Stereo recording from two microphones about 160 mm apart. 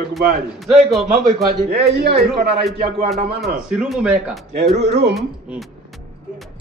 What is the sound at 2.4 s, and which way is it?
Speech, 90° right.